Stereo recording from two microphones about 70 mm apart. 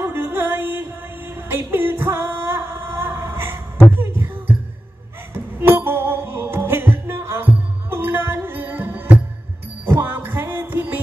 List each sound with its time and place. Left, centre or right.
0.0 s music: right
4.0 s heart sounds: right
5.7 s music: right